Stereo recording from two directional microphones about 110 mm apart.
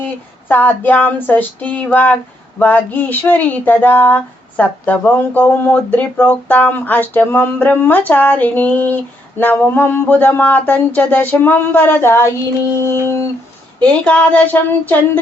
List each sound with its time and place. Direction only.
0.4 s speech: 15° left (ahead or behind)
12.9 s a sound: 25° left (ahead or behind)
13.8 s speech: 10° left (ahead or behind)